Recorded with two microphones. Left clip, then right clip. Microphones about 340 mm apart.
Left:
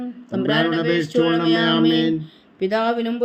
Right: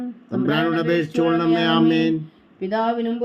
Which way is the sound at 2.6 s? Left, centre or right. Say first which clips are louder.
Left 2 dB; left.